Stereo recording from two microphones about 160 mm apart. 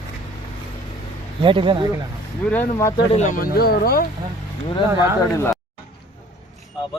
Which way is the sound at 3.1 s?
55° left (ahead or behind).